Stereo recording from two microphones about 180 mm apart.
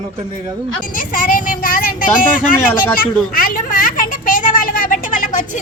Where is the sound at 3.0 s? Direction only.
50° left (ahead or behind).